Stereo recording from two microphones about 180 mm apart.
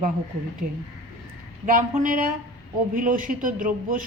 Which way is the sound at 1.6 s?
50° right (ahead or behind).